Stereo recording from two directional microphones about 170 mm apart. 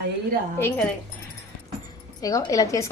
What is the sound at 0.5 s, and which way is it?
Speech, 10° left (ahead or behind).